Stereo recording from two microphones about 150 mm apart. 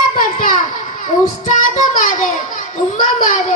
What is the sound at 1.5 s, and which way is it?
Child singing, 55° left (ahead or behind).